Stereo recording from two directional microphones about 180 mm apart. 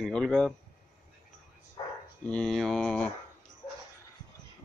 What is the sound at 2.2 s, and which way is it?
Speech, 5° left (ahead or behind).